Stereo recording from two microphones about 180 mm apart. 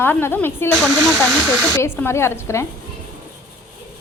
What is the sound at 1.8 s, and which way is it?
Speech, 15° left (ahead or behind).